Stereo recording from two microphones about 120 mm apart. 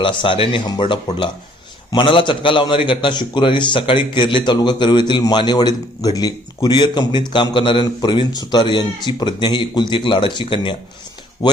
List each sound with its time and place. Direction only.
0.0 s a man's voice: 40° left (ahead or behind)